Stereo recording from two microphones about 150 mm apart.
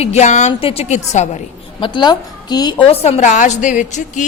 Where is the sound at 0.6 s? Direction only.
40° left (ahead or behind).